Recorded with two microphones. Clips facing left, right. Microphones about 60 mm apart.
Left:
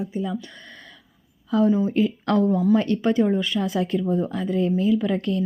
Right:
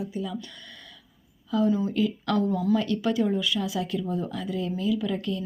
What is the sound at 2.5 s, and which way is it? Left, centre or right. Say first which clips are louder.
Speech: left 5 dB; left.